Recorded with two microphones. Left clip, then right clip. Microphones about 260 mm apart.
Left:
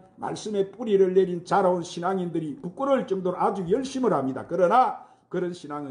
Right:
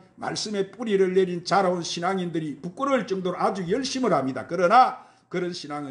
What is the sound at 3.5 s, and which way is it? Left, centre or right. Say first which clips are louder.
A man's voice: even; right.